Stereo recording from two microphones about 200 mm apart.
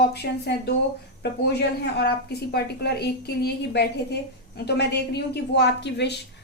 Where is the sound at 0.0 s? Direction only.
55° left (ahead or behind).